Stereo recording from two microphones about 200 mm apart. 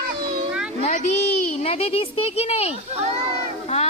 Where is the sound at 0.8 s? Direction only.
35° left (ahead or behind).